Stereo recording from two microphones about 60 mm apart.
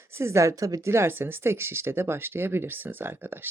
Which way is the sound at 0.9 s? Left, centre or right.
Right.